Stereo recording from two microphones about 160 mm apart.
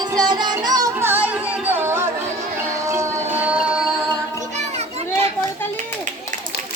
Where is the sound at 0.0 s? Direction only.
25° right (ahead or behind).